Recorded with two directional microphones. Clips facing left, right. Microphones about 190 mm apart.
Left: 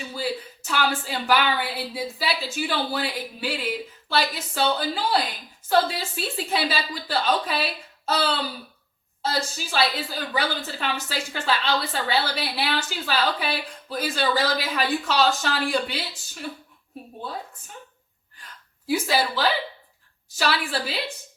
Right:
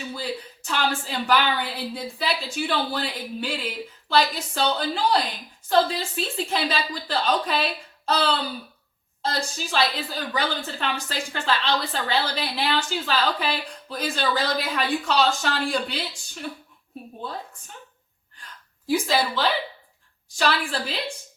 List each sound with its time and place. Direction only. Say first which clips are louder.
0.1 s a woman's voice: left 2 dB; 5° left (ahead or behind)
18.9 s a woman's voice: right 1 dB; 5° left (ahead or behind)